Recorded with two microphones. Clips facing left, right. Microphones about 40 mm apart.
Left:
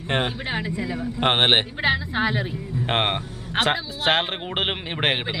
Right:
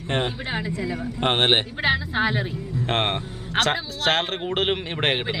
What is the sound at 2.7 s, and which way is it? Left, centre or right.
Speech, centre.